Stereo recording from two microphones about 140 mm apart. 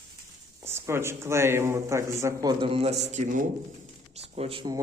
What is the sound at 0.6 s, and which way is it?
Speech, 15° right (ahead or behind).